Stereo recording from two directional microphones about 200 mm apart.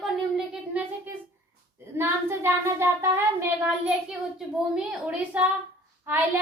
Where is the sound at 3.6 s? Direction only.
5° right (ahead or behind).